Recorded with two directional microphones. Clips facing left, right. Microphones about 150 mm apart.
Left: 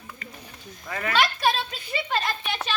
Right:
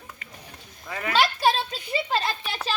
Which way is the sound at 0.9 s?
10° right (ahead or behind).